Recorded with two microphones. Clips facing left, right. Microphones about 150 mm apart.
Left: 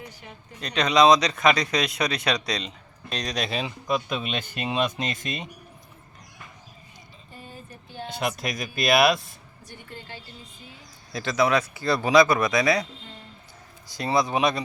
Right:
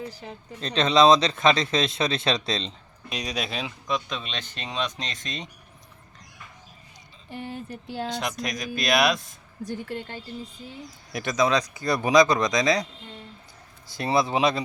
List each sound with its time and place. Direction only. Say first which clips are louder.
0.0 s speech: right 6 dB; 30° right (ahead or behind)
3.1 s speech: left 2 dB; 10° right (ahead or behind); by 5.5 s 5° left (ahead or behind)
7.3 s speech: right 9 dB; 75° right (ahead or behind)
8.1 s speech: left 1 dB; 5° left (ahead or behind)
10.7 s speech: right 4 dB; 20° right (ahead or behind)